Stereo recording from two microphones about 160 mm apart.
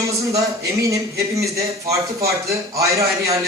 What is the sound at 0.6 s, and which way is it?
A man's voice, 20° right (ahead or behind).